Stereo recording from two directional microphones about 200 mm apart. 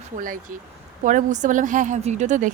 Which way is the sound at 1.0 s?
40° right (ahead or behind).